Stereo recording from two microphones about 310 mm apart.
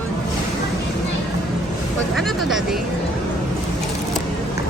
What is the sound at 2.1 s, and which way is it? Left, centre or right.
Speech, centre.